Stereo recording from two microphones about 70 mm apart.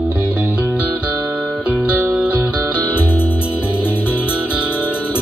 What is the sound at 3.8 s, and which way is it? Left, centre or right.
Music, left.